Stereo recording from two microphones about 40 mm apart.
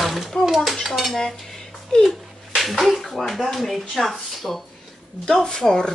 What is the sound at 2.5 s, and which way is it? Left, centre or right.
Speech, centre.